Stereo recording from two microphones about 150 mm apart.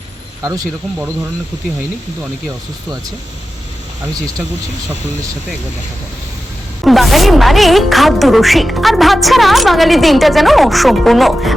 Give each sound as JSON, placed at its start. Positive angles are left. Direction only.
{"t": 0.4, "sound": "speech", "side_deg": -25}
{"t": 6.8, "sound": "a woman's voice", "side_deg": 0}